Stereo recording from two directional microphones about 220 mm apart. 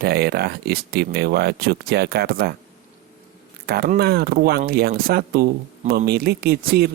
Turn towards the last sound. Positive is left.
turn(degrees=-45)  # may be behind; listen again after turning